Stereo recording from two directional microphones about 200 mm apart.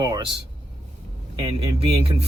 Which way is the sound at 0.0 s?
20° right (ahead or behind).